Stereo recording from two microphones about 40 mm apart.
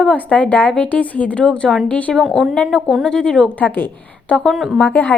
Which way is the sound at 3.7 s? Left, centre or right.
Left.